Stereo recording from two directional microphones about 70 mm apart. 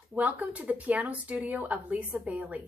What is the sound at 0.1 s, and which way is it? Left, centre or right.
A woman's voice, right.